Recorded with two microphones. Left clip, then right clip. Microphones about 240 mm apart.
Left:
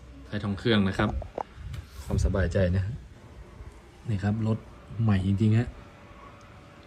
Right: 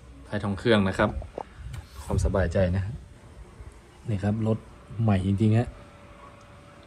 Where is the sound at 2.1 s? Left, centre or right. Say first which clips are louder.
Right 3 dB; centre.